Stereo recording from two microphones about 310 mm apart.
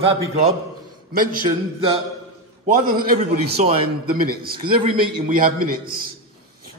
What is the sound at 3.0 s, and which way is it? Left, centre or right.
A man's voice, right.